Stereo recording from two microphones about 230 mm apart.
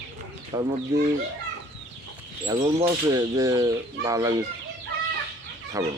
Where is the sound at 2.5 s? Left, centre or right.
Right.